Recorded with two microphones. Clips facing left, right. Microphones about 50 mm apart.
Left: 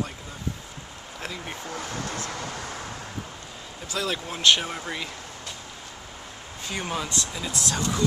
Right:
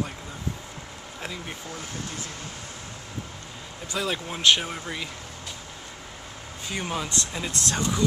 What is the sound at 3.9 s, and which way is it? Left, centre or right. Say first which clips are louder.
Speech: even; centre.